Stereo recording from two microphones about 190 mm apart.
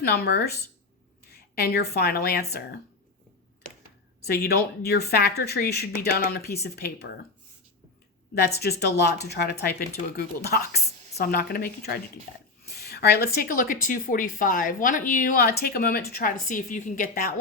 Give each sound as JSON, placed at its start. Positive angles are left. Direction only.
{"t": 0.0, "sound": "a woman's voice", "side_deg": 55}
{"t": 4.3, "sound": "speech", "side_deg": 55}
{"t": 8.4, "sound": "speech", "side_deg": 60}